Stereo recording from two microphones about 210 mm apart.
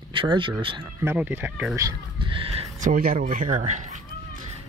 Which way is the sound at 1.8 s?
25° right (ahead or behind).